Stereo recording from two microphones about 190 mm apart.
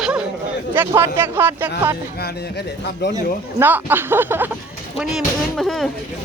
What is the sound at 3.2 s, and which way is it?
Speech, 10° right (ahead or behind).